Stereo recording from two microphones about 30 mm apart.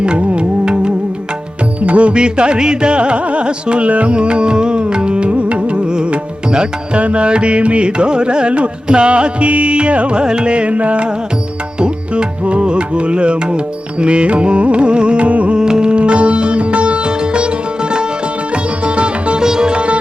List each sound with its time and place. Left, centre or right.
0.0 s music: right
1.9 s music: right
2.1 s carnatic music: right
3.8 s music: right
6.9 s carnatic music: right
11.8 s music: right
14.0 s carnatic music: right
15.3 s carnatic music: right
15.5 s sitar: right
19.4 s sitar: right